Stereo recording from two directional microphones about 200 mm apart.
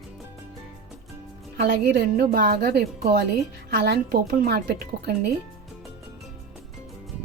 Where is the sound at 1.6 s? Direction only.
55° right (ahead or behind).